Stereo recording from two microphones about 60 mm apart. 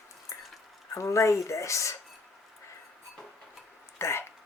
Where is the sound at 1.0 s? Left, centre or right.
Left.